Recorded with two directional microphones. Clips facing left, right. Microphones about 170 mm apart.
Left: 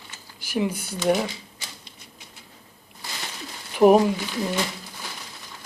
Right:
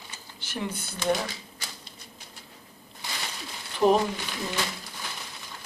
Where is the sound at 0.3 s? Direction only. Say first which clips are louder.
Left 8 dB; 10° left (ahead or behind).